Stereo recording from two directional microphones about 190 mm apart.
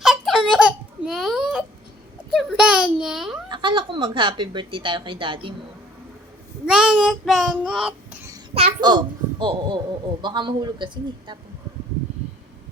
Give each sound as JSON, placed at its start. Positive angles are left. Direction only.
{"t": 0.0, "sound": "a sound", "side_deg": 0}
{"t": 3.5, "sound": "a child's voice", "side_deg": -25}
{"t": 6.7, "sound": "child singing", "side_deg": -5}
{"t": 8.5, "sound": "a child's voice", "side_deg": -25}